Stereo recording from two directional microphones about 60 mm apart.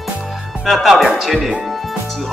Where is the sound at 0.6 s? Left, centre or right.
Centre.